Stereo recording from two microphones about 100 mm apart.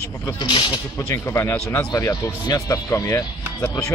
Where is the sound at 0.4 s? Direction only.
55° left (ahead or behind).